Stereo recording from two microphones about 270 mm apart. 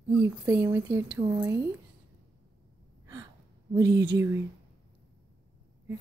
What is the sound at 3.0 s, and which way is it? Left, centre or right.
Gasp, centre.